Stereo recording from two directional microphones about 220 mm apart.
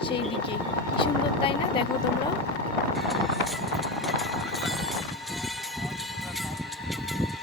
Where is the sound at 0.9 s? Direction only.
25° left (ahead or behind).